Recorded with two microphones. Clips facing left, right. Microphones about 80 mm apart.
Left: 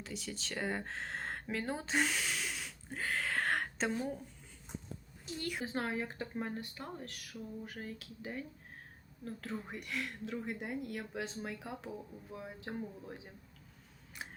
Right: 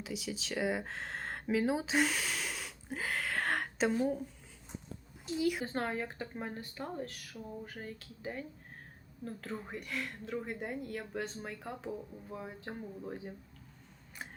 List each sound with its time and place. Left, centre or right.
0.0 s speech: centre
5.4 s speech: centre